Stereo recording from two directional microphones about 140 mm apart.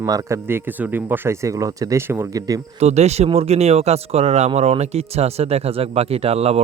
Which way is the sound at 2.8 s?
50° right (ahead or behind).